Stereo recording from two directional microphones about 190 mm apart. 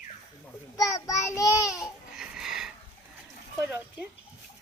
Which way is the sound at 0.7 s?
15° left (ahead or behind).